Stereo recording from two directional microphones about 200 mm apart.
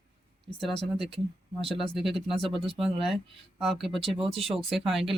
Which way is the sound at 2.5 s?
30° right (ahead or behind).